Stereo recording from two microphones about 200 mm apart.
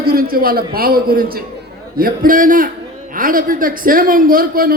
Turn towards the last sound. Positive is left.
turn(degrees=-45)  # may be behind; listen again after turning